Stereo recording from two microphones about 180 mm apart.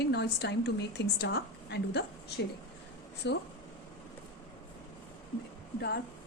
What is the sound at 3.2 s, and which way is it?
Speech, 70° left (ahead or behind).